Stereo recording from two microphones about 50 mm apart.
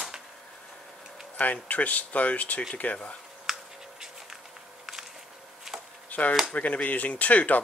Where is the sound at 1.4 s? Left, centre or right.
Left.